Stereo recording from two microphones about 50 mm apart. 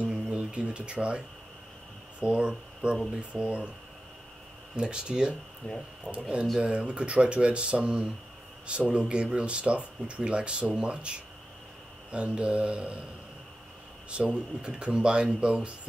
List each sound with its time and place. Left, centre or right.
0.0 s music: right
2.1 s speech: right
4.7 s speech: centre
5.6 s speech: left
6.1 s speech: right
14.1 s speech: right